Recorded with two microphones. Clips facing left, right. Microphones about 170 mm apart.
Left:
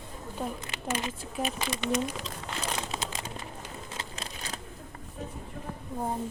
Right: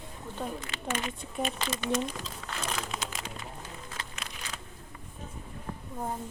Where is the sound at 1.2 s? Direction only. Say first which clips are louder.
Left 1 dB; 5° left (ahead or behind).